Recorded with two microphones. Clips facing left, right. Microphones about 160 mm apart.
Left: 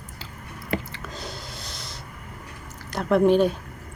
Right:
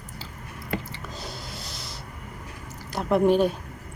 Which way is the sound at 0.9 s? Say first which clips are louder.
Left 1 dB; 5° right (ahead or behind).